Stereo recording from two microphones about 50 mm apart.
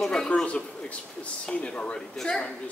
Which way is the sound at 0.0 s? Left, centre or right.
Centre.